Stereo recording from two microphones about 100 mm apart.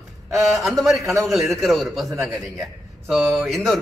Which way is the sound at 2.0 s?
30° right (ahead or behind).